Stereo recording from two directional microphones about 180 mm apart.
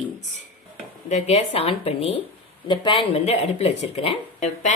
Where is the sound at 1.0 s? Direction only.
35° left (ahead or behind).